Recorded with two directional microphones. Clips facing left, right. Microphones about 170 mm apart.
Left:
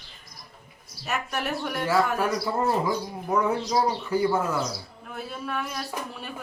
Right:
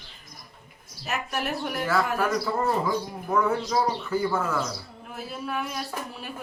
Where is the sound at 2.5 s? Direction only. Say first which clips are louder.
Even; 15° left (ahead or behind).